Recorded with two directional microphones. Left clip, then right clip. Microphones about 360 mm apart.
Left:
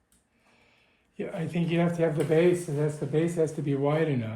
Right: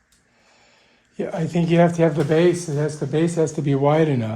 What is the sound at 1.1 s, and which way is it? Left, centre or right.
Speech, centre.